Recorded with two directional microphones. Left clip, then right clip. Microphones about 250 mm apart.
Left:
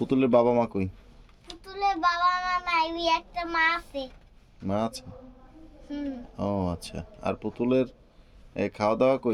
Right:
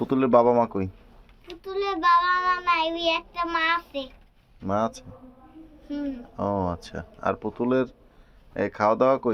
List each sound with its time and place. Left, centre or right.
0.0 s speech: left
1.5 s child singing: centre
4.6 s speech: left
5.9 s speech: centre